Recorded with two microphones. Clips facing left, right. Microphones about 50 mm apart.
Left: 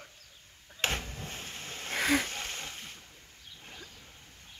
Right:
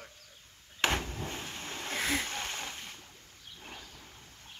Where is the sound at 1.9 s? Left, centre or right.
Left.